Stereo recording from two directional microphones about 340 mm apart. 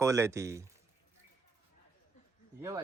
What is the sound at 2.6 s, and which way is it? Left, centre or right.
Speech, centre.